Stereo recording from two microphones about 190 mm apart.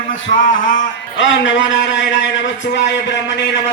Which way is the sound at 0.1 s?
45° left (ahead or behind).